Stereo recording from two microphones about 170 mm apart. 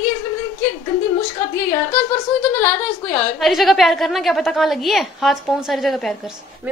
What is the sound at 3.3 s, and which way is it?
A woman's voice, centre (ahead or behind).